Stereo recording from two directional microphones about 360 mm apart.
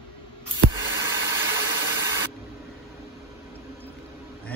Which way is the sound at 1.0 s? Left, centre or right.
Centre.